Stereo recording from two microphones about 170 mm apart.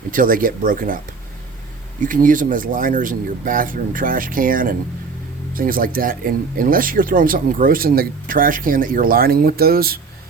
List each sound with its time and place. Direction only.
0.1 s speech: 55° right (ahead or behind)
2.0 s speech: 50° right (ahead or behind)